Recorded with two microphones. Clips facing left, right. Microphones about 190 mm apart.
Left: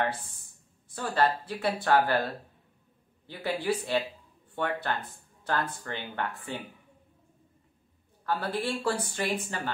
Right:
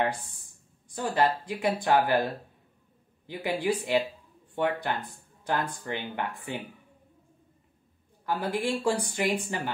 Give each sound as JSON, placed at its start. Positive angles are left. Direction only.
{"t": 0.0, "sound": "speech", "side_deg": -15}
{"t": 8.3, "sound": "speech", "side_deg": -15}